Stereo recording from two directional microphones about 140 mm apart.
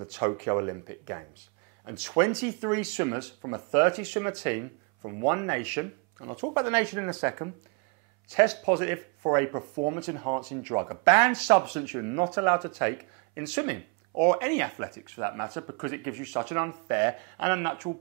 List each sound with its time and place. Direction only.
0.0 s speech: 25° right (ahead or behind)